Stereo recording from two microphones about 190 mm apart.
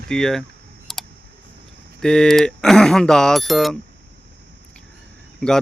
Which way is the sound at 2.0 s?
5° left (ahead or behind).